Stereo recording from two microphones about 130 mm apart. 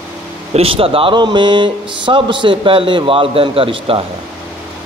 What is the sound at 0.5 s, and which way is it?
Speech, 45° right (ahead or behind).